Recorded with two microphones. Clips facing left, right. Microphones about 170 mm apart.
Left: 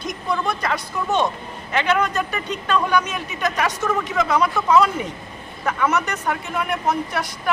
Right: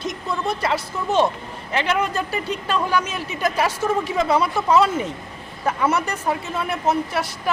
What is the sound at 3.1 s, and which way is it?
Speech, 30° right (ahead or behind).